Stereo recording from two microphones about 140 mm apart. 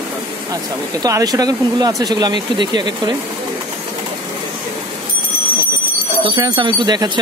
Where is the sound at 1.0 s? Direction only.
25° right (ahead or behind).